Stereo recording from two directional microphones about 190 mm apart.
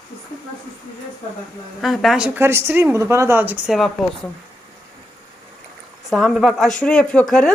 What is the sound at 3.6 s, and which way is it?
Speech, centre (ahead or behind).